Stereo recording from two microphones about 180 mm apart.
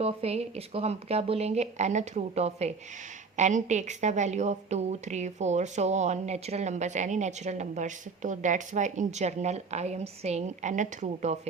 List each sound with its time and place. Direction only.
0.0 s a woman's voice: 35° right (ahead or behind)